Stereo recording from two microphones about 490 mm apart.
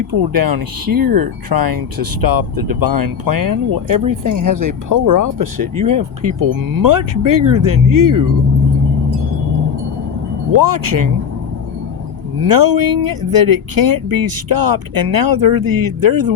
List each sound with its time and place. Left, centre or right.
0.1 s speech: right
10.5 s speech: right
12.4 s speech: right